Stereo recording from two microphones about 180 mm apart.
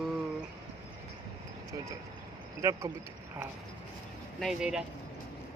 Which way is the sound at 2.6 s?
15° right (ahead or behind).